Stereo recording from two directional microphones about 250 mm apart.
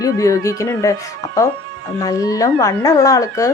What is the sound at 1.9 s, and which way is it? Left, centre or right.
Speech, centre.